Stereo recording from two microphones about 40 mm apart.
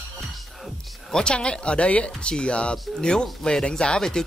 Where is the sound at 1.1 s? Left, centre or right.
Left.